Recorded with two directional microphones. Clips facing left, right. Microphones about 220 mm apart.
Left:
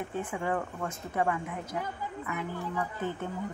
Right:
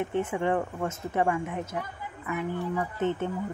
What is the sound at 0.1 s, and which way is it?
Speech, 25° right (ahead or behind).